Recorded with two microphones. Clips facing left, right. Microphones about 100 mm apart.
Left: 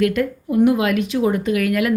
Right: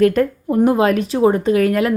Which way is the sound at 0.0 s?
35° right (ahead or behind).